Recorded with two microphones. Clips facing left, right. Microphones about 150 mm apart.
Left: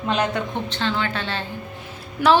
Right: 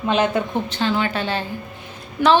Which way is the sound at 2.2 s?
10° left (ahead or behind).